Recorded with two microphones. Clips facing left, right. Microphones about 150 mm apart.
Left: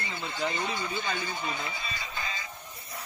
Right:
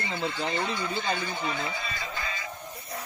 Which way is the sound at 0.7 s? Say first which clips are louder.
Right 2 dB; 15° left (ahead or behind).